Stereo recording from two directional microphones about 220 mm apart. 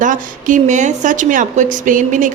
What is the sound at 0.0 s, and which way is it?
A woman's voice, 35° right (ahead or behind).